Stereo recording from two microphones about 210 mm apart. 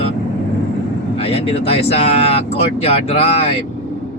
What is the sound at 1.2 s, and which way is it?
Speech, 25° left (ahead or behind).